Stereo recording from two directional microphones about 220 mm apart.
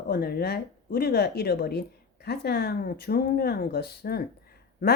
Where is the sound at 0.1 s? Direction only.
45° left (ahead or behind).